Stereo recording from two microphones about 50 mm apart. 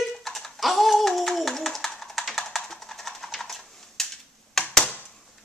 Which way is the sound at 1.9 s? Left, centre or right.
Centre.